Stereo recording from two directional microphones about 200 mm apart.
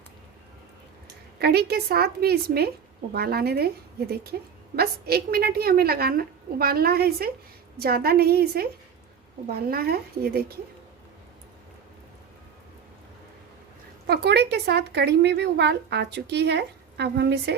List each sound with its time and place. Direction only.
1.4 s a woman's voice: 50° right (ahead or behind)
14.1 s speech: 55° right (ahead or behind)